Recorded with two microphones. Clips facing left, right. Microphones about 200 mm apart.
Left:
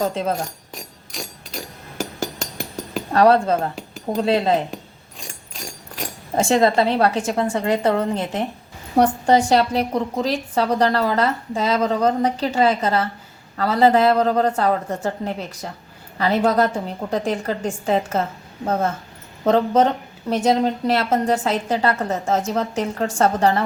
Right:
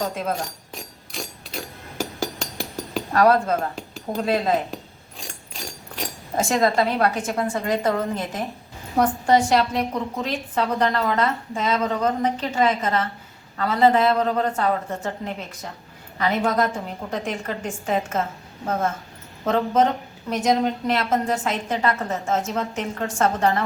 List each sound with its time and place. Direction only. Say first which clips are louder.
0.4 s a sound: left 1 dB; centre (ahead or behind)
3.1 s a woman's voice: left 3 dB; 30° left (ahead or behind)
3.8 s cutlery: left 4 dB; centre (ahead or behind)
4.2 s a woman's voice: left 3 dB; 30° left (ahead or behind)
5.2 s a sound: left 1 dB; centre (ahead or behind)
6.5 s a woman's voice: left 4 dB; 30° left (ahead or behind)
19.5 s a woman's voice: left 3 dB; 35° left (ahead or behind)